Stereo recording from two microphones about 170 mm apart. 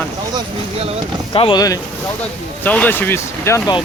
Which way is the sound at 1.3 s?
30° left (ahead or behind).